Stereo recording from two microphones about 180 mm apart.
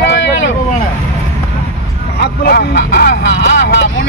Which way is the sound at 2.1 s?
65° left (ahead or behind).